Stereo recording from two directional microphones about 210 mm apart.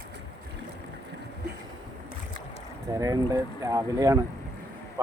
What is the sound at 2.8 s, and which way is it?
Speech, 15° right (ahead or behind).